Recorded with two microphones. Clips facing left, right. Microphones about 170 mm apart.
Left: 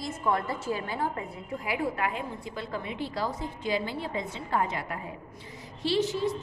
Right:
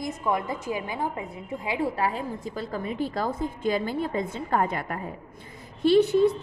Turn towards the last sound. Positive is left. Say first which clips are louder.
# right 8 dB
turn(degrees=-55)  # may be behind; listen again after turning